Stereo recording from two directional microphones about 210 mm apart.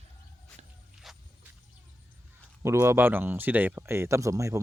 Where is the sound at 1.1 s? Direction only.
Centre (ahead or behind).